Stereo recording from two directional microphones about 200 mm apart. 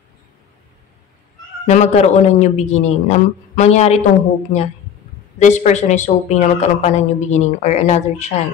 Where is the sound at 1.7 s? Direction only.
35° left (ahead or behind).